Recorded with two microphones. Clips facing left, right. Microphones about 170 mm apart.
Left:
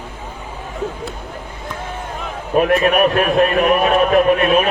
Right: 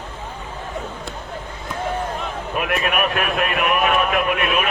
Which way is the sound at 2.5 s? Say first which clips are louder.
Left 9 dB; 35° left (ahead or behind).